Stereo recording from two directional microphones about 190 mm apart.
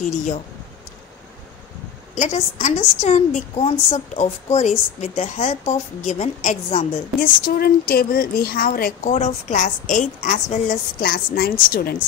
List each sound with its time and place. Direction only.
0.0 s a woman's voice: 40° left (ahead or behind)
2.1 s a woman's voice: 40° left (ahead or behind)
7.2 s speech: 50° left (ahead or behind)
9.1 s a woman's voice: 35° left (ahead or behind)